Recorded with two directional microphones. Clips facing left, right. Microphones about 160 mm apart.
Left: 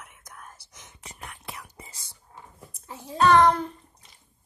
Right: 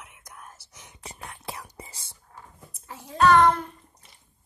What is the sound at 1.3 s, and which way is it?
Whispering, 30° right (ahead or behind).